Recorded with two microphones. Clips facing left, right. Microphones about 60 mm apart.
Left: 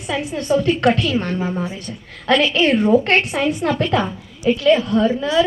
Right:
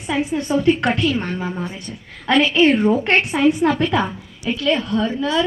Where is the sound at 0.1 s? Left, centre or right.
Right.